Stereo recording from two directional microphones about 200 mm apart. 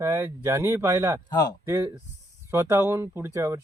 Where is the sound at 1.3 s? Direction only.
20° left (ahead or behind).